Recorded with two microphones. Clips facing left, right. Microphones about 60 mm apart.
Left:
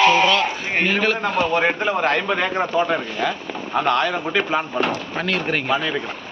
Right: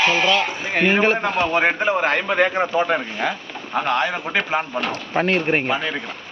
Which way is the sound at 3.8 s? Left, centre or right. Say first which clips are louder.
Left 1 dB; centre.